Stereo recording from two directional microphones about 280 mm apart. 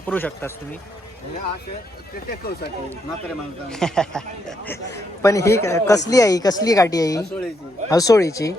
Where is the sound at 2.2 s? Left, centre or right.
Left.